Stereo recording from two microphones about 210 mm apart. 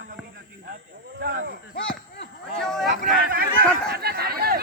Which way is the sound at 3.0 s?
40° right (ahead or behind).